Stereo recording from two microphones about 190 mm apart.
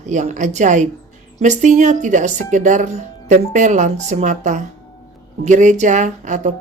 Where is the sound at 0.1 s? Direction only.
40° right (ahead or behind).